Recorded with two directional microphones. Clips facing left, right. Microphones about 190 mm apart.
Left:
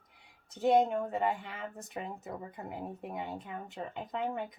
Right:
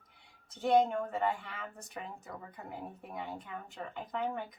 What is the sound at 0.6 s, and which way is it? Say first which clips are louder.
Speech: left 1 dB; 20° left (ahead or behind).